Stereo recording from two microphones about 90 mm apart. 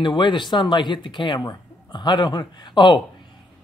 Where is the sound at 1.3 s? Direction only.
50° left (ahead or behind).